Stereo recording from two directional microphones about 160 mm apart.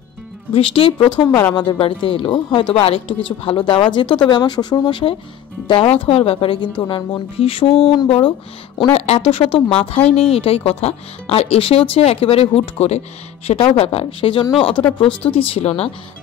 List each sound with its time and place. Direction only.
0.5 s speech: 35° left (ahead or behind)
14.8 s speech: 10° left (ahead or behind)
15.3 s speech: 35° left (ahead or behind)